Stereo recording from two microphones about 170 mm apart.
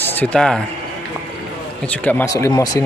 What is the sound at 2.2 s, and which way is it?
Speech, 20° left (ahead or behind).